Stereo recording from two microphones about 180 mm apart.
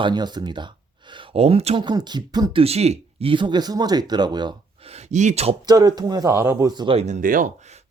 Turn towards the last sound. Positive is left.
turn(degrees=-45)  # may be behind; listen again after turning